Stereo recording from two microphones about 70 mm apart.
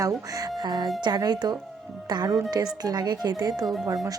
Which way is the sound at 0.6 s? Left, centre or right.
Right.